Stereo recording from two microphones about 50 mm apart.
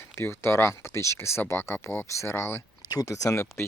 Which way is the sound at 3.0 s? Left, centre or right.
Left.